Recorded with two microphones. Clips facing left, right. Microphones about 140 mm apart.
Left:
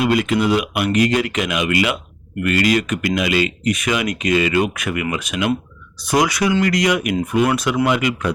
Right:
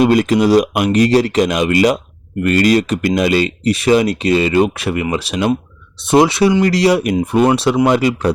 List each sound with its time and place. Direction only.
0.0 s speech: 40° right (ahead or behind)